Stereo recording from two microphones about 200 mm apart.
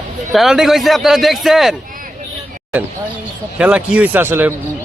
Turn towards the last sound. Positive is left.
turn(degrees=-10)  # may be behind; listen again after turning